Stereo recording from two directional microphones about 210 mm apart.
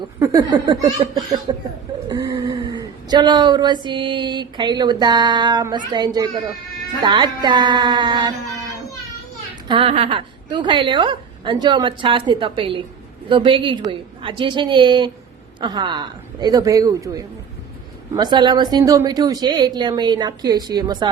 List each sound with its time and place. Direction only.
0.2 s a woman's voice: 15° right (ahead or behind)
9.6 s a woman's voice: 25° right (ahead or behind)